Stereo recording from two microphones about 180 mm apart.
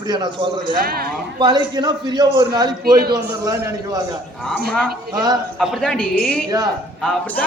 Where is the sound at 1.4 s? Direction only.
25° right (ahead or behind).